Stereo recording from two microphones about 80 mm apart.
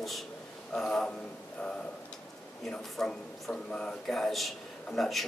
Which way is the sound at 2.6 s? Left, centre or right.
Centre.